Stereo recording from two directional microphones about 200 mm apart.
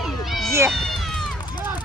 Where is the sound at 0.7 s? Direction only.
Centre (ahead or behind).